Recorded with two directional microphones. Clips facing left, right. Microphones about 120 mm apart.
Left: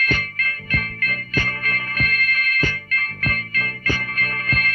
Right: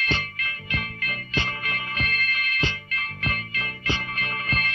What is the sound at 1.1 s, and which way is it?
Music, 20° right (ahead or behind).